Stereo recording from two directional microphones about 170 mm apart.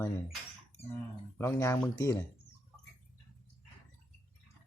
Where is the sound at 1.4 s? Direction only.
15° left (ahead or behind).